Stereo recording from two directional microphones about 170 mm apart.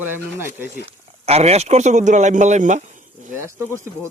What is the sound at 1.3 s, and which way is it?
Speech, 40° right (ahead or behind).